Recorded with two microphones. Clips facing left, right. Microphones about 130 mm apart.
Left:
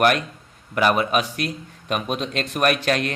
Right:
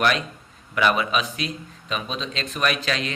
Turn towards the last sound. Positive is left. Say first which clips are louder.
# left 4 dB
turn(degrees=55)  # may be behind; listen again after turning